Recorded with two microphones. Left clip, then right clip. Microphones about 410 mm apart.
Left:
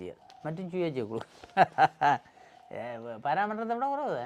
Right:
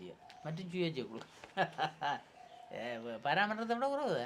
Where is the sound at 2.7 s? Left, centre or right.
Left.